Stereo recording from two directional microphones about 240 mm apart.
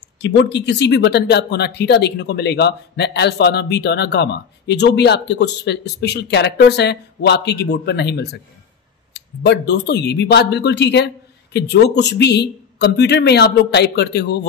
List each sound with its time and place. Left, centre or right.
0.2 s speech: left